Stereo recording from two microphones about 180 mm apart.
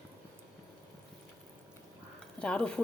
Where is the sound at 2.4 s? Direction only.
5° left (ahead or behind).